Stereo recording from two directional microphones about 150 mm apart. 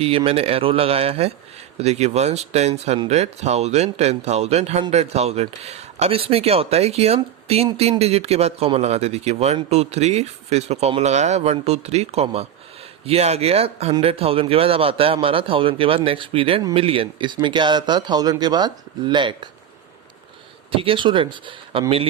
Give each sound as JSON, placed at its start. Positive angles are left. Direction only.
{"t": 0.3, "sound": "speech", "side_deg": -40}
{"t": 20.7, "sound": "speech", "side_deg": -35}